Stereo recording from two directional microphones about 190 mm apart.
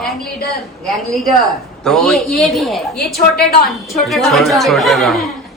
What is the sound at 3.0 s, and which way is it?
Speech, 55° left (ahead or behind).